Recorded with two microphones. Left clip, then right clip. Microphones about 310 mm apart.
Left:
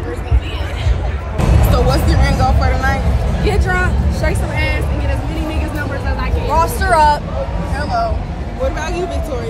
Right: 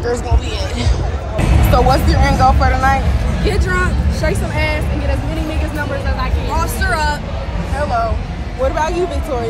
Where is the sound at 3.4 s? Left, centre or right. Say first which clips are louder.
Left 1 dB; centre.